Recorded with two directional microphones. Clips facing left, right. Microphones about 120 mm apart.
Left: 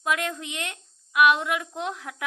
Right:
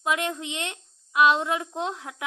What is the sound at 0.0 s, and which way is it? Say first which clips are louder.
A woman's voice: right 1 dB; 20° right (ahead or behind).